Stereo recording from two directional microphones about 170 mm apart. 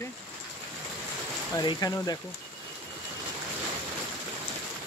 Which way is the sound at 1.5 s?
20° left (ahead or behind).